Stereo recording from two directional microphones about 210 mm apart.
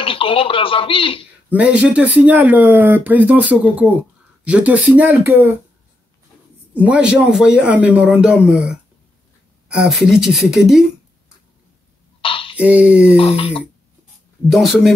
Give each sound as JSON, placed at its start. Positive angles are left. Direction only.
{"t": 0.0, "sound": "speech", "side_deg": 25}
{"t": 1.5, "sound": "speech", "side_deg": -5}
{"t": 6.7, "sound": "a man's voice", "side_deg": -5}
{"t": 12.2, "sound": "a sound", "side_deg": 25}
{"t": 12.5, "sound": "a man's voice", "side_deg": -5}
{"t": 13.2, "sound": "speech", "side_deg": 25}
{"t": 14.5, "sound": "a man's voice", "side_deg": 0}